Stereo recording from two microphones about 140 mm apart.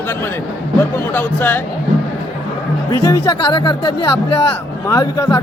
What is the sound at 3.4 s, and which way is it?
A man's voice, 35° left (ahead or behind).